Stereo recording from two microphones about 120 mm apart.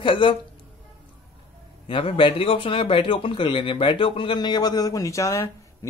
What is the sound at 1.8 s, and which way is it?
Speech, 45° left (ahead or behind).